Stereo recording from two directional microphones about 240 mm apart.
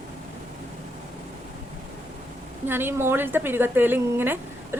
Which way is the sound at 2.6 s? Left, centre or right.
Centre.